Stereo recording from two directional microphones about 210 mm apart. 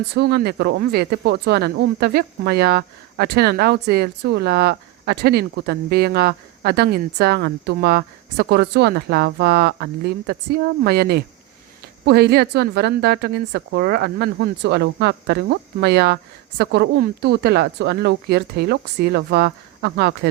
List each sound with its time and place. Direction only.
0.1 s speech: 50° right (ahead or behind)